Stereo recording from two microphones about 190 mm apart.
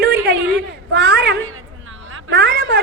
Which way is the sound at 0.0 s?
60° right (ahead or behind).